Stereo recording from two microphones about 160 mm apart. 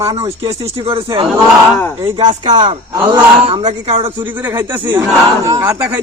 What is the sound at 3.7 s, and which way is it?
Speech, 40° right (ahead or behind).